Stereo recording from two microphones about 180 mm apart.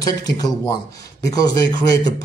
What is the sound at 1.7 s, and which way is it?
Speech, 20° left (ahead or behind).